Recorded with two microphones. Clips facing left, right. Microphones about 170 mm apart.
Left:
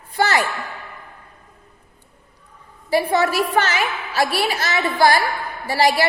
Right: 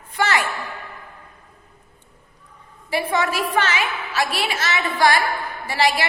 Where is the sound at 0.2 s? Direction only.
35° left (ahead or behind).